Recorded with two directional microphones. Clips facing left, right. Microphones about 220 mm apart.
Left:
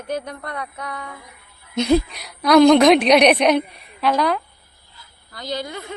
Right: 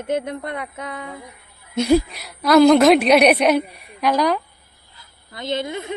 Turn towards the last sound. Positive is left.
turn(degrees=-20)  # may be behind; listen again after turning